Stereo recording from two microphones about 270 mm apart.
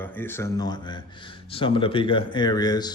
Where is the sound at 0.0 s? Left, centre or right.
Centre.